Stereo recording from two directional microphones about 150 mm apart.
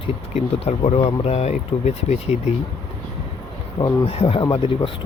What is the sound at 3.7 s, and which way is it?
Speech, 35° left (ahead or behind).